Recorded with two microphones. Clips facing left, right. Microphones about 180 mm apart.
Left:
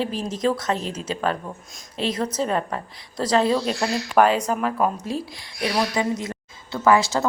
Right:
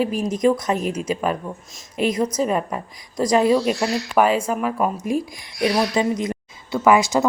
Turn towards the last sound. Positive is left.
turn(degrees=-15)  # may be behind; listen again after turning